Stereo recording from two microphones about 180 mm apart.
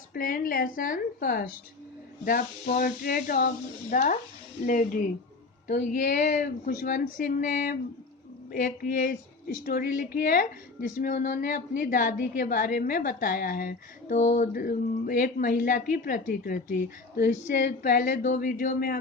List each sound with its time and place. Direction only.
0.1 s a woman's voice: 55° left (ahead or behind)